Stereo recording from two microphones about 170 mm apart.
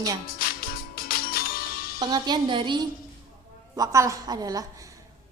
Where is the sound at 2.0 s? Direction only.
25° right (ahead or behind).